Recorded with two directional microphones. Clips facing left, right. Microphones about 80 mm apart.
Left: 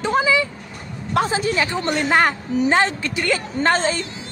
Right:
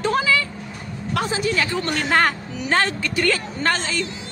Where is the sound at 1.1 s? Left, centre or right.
Left.